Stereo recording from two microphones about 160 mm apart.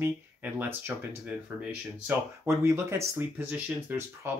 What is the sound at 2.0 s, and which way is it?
Speech, 15° right (ahead or behind).